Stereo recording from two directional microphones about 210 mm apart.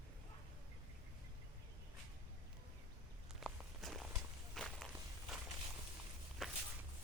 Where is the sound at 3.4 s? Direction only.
Centre (ahead or behind).